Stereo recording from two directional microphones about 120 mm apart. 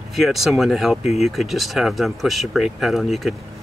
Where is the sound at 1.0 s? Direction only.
65° left (ahead or behind).